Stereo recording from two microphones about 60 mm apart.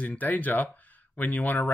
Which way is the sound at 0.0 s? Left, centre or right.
Left.